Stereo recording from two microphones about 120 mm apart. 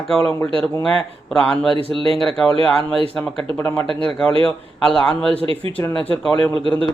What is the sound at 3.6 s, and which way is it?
Speech, 20° left (ahead or behind).